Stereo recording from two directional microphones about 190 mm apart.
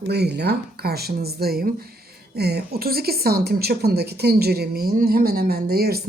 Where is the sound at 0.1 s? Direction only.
60° right (ahead or behind).